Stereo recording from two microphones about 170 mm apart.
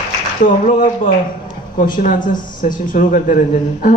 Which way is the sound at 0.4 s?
50° left (ahead or behind).